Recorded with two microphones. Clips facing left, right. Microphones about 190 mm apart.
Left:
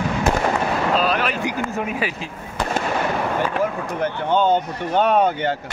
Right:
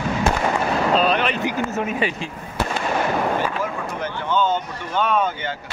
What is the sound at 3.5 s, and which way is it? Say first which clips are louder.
Speech: left 4 dB; 60° left (ahead or behind).